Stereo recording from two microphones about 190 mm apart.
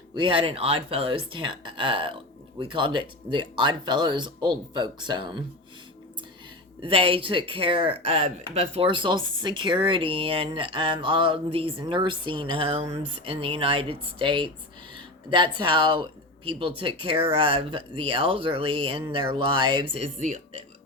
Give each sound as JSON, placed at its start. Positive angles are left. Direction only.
{"t": 0.1, "sound": "speech", "side_deg": -25}
{"t": 6.8, "sound": "speech", "side_deg": -30}